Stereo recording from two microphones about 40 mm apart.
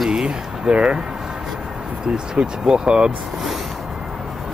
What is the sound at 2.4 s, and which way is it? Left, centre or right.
Speech, right.